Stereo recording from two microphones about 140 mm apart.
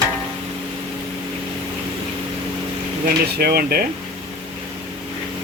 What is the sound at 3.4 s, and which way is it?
Speech, 90° right.